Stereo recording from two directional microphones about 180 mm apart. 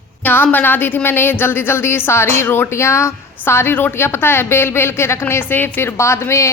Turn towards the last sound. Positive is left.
turn(degrees=15)  # may be behind; listen again after turning